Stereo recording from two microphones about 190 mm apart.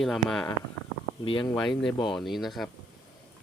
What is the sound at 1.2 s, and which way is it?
Speech, 25° left (ahead or behind).